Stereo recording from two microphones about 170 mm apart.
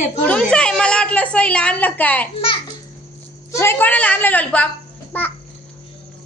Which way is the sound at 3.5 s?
15° left (ahead or behind).